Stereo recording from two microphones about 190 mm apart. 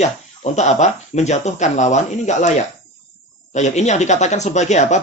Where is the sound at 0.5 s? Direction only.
35° left (ahead or behind).